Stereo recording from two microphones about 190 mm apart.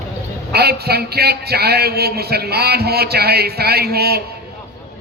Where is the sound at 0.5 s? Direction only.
55° right (ahead or behind).